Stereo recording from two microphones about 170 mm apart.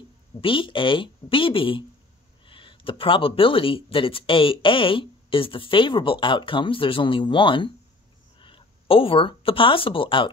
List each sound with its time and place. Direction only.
0.4 s speech: 30° left (ahead or behind)